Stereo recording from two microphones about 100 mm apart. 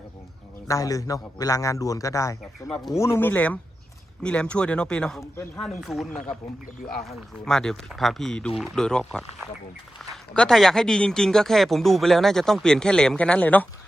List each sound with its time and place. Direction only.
0.7 s a man's voice: 35° left (ahead or behind)
2.6 s speech: 5° left (ahead or behind)
3.0 s a man's voice: 25° left (ahead or behind); by 6.1 s centre (ahead or behind)
7.4 s a man's voice: 5° left (ahead or behind)